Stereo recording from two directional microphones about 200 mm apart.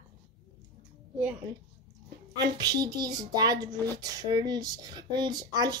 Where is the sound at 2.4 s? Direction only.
20° right (ahead or behind).